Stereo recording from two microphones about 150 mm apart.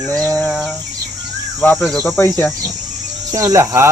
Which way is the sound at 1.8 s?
Centre (ahead or behind).